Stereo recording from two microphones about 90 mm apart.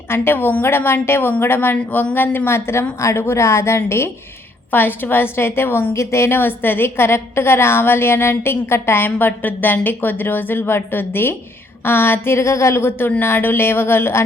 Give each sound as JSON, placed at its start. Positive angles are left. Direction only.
{"t": 0.1, "sound": "a woman's voice", "side_deg": 25}